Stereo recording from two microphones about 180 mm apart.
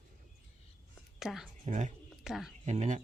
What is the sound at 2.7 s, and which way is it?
Speech, 40° right (ahead or behind).